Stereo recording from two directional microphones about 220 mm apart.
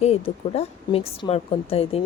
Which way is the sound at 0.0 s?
30° left (ahead or behind).